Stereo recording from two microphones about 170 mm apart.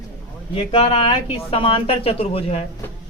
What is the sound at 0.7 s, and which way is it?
Speech, 35° left (ahead or behind).